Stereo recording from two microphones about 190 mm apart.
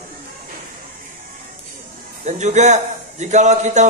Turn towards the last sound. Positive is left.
turn(degrees=-40)  # may be behind; listen again after turning